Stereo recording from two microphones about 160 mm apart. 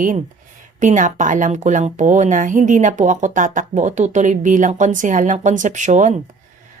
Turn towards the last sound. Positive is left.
turn(degrees=-50)  # may be behind; listen again after turning